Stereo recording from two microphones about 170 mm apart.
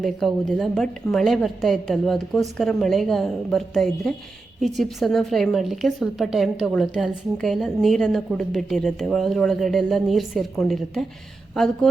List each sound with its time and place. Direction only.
0.0 s a woman's voice: centre (ahead or behind)